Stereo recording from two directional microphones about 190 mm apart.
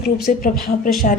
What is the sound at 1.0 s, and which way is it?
Speech, 50° left (ahead or behind).